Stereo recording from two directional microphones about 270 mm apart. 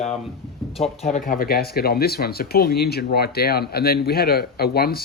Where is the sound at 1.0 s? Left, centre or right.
Left.